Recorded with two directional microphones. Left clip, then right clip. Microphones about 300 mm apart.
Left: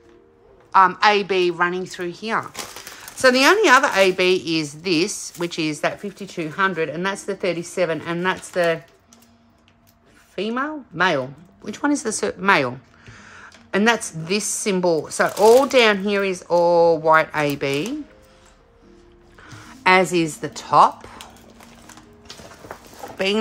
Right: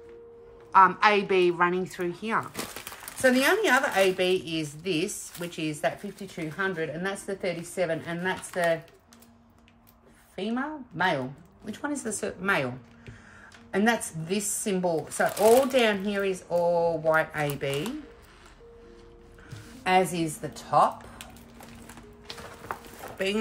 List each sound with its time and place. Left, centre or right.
0.7 s a woman's voice: centre
3.2 s a woman's voice: centre
10.3 s a woman's voice: left
19.4 s speech: left
23.1 s speech: centre